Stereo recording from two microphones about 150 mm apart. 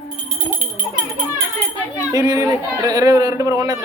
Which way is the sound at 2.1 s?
25° right (ahead or behind).